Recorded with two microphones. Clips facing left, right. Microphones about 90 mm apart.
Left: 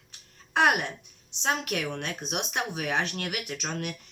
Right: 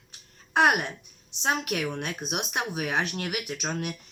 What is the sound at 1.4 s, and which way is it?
Speech, 15° right (ahead or behind).